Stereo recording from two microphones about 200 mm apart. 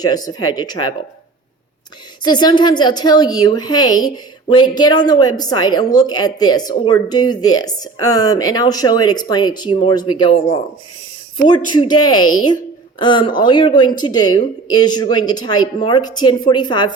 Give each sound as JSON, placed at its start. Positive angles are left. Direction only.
{"t": 0.0, "sound": "a woman's voice", "side_deg": 20}
{"t": 2.2, "sound": "a woman's voice", "side_deg": 20}